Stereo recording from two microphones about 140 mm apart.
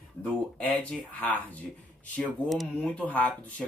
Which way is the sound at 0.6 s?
10° left (ahead or behind).